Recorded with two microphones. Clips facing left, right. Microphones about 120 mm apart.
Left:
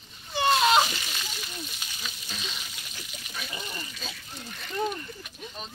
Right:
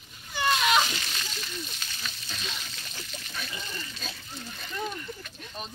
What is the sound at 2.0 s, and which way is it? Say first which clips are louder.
Speech: even; 10° left (ahead or behind).